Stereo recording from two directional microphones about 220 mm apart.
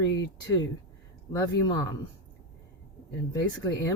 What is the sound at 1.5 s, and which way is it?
Speech, 15° left (ahead or behind).